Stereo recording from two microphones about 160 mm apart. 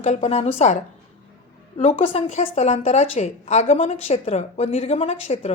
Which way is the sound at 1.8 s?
40° left (ahead or behind).